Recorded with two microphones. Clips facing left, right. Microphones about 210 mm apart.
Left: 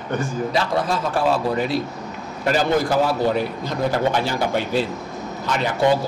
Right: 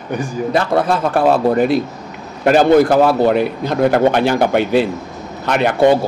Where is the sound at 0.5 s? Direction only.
55° right (ahead or behind).